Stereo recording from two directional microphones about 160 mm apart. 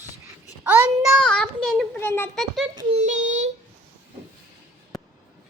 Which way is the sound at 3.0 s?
45° right (ahead or behind).